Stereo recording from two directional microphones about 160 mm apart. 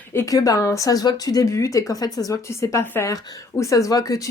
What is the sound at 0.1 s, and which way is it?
Speech, 20° left (ahead or behind).